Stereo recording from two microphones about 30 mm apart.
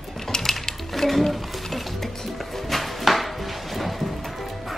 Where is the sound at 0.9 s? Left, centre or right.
Centre.